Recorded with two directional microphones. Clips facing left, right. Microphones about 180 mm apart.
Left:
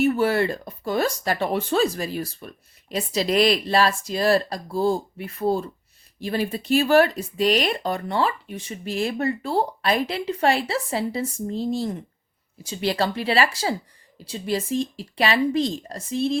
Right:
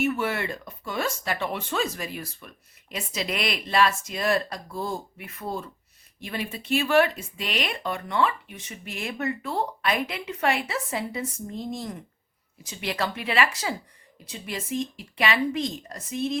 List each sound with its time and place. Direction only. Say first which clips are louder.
0.0 s speech: left 6 dB; 35° left (ahead or behind)